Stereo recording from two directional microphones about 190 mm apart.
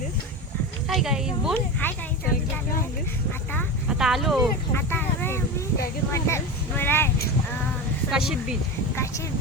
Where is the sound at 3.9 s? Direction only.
5° right (ahead or behind).